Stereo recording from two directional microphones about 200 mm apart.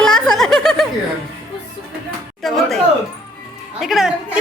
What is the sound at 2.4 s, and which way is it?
Speech, centre (ahead or behind).